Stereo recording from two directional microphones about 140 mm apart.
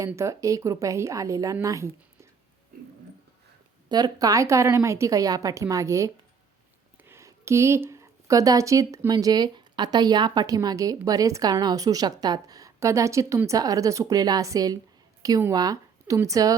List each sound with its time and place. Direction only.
0.1 s speech: 20° right (ahead or behind)
3.8 s speech: 30° right (ahead or behind)
7.1 s a woman's voice: 20° right (ahead or behind)